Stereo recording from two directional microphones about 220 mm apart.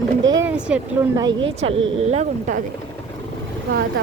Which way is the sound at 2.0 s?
30° right (ahead or behind).